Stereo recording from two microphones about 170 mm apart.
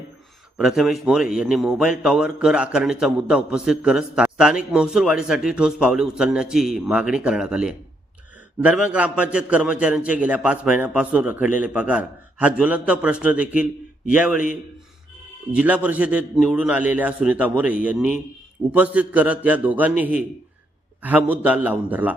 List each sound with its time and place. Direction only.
0.5 s a man's voice: centre (ahead or behind)
15.5 s a man's voice: 10° right (ahead or behind)